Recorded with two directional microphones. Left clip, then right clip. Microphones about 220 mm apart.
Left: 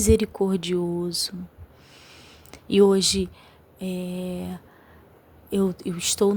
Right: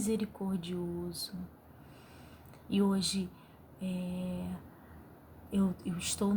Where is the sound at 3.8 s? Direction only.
45° left (ahead or behind).